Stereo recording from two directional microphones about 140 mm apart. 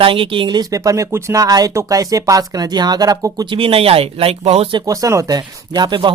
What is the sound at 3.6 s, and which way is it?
Speech, 40° right (ahead or behind).